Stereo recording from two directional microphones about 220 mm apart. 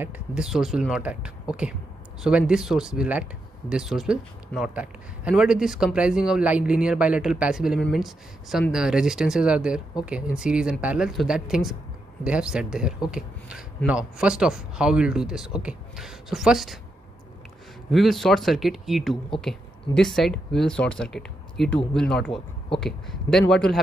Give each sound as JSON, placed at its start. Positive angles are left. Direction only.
{"t": 0.0, "sound": "speech", "side_deg": -5}
{"t": 17.9, "sound": "speech", "side_deg": 0}